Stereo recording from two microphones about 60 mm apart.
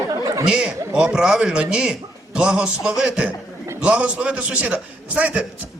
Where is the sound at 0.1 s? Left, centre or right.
Right.